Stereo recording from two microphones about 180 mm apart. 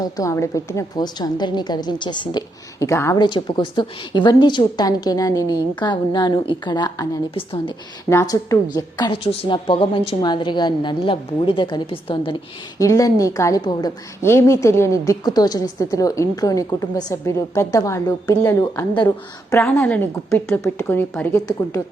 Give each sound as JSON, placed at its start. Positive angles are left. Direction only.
{"t": 0.0, "sound": "a woman's voice", "side_deg": 15}
{"t": 7.3, "sound": "a woman's voice", "side_deg": 30}
{"t": 8.1, "sound": "a woman's voice", "side_deg": 15}
{"t": 12.8, "sound": "a woman's voice", "side_deg": 20}